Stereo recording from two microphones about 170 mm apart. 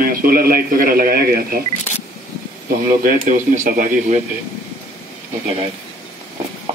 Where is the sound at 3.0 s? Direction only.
55° right (ahead or behind).